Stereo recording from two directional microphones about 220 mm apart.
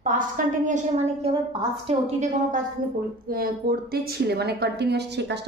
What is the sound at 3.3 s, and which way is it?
A woman's voice, 45° right (ahead or behind).